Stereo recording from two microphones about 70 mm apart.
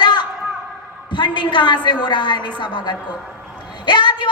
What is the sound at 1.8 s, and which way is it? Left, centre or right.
A woman's voice, left.